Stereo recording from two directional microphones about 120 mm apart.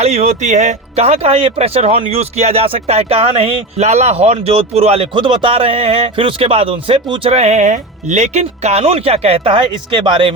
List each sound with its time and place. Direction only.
0.0 s speech: 70° right (ahead or behind)
5.1 s a man's voice: 45° right (ahead or behind)